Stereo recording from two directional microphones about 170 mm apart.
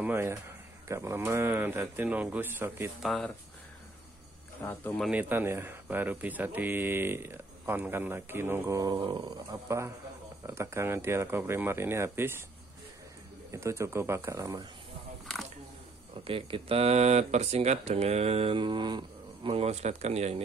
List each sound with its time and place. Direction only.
0.0 s speech: 15° right (ahead or behind)
3.0 s speech: centre (ahead or behind)
4.6 s speech: 10° left (ahead or behind)
5.0 s speech: 10° right (ahead or behind)
13.5 s speech: 15° right (ahead or behind)
16.3 s speech: 35° right (ahead or behind)